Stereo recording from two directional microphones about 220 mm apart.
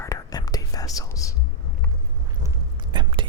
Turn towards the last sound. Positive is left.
turn(degrees=-20)  # may be behind; listen again after turning